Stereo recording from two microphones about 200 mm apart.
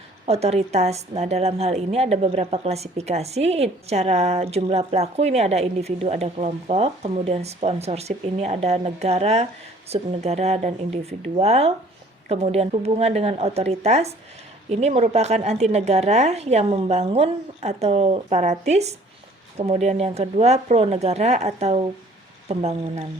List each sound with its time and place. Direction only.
0.3 s a woman's voice: 30° right (ahead or behind)